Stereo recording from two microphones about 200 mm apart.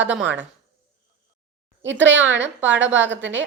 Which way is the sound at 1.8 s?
65° right (ahead or behind).